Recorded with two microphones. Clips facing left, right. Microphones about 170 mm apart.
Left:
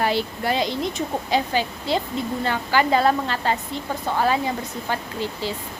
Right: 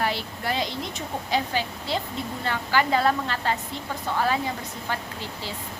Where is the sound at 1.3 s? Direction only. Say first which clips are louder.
Left 3 dB; 90° left.